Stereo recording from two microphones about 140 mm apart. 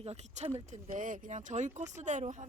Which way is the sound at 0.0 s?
50° right (ahead or behind).